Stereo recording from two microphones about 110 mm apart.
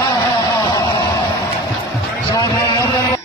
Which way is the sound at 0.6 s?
35° left (ahead or behind).